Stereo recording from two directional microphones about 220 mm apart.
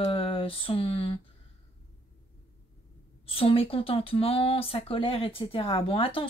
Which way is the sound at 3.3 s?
25° left (ahead or behind).